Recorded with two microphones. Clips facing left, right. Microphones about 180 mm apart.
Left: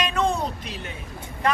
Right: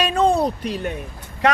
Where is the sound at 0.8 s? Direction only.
65° right (ahead or behind).